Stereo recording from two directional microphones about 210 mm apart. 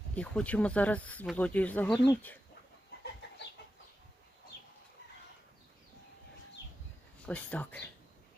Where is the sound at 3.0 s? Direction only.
55° left (ahead or behind).